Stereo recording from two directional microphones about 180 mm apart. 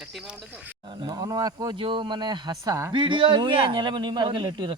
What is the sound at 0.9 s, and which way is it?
A man's voice, 25° right (ahead or behind).